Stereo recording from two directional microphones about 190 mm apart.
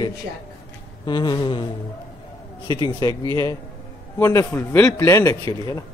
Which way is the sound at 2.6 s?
20° left (ahead or behind).